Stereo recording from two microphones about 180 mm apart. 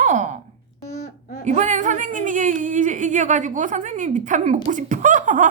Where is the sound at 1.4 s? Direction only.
40° right (ahead or behind).